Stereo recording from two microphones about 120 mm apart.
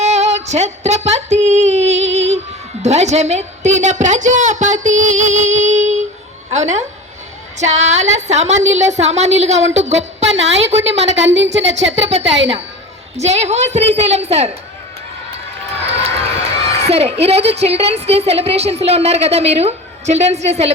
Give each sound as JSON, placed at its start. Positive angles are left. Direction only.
{"t": 0.0, "sound": "a sound", "side_deg": -70}
{"t": 2.8, "sound": "a woman's voice", "side_deg": -70}
{"t": 13.1, "sound": "a woman's voice", "side_deg": -65}
{"t": 15.7, "sound": "run", "side_deg": -60}
{"t": 16.6, "sound": "a woman's voice", "side_deg": -60}